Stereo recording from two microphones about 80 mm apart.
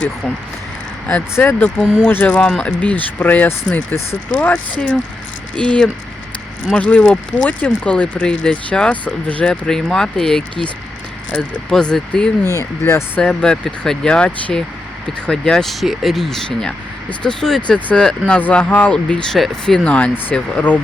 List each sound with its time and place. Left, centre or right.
1.0 s speech: centre
11.7 s speech: centre
12.8 s speech: left
13.2 s speech: centre